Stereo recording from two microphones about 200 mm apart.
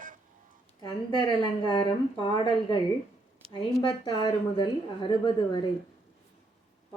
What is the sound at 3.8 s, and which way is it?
A woman's voice, 20° left (ahead or behind).